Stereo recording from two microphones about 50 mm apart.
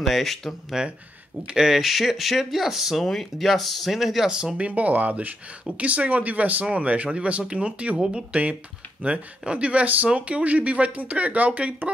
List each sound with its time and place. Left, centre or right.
0.0 s speech: centre
1.5 s speech: centre
4.3 s speech: centre
9.4 s speech: right